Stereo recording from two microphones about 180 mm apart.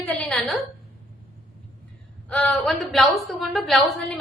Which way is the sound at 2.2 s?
5° left (ahead or behind).